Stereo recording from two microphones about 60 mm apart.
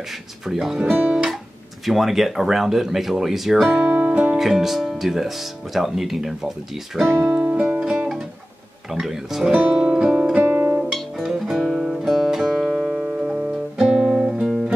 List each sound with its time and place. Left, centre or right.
0.5 s speech: centre
3.7 s music: right
4.4 s speech: centre
7.2 s music: right
7.8 s music: centre
10.3 s guitar: right
10.8 s music: centre
12.7 s music: centre
13.7 s music: centre